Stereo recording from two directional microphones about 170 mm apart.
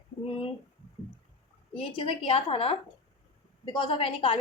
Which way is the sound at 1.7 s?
35° left (ahead or behind).